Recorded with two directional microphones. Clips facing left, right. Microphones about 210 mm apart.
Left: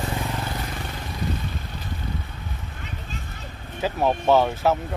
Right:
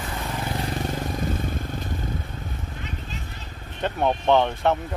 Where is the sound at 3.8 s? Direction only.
5° left (ahead or behind).